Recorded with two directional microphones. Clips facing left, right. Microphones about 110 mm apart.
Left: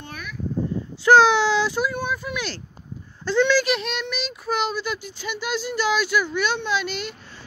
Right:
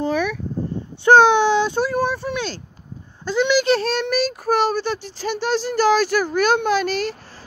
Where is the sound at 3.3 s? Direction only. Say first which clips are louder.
Right 1 dB; 15° right (ahead or behind).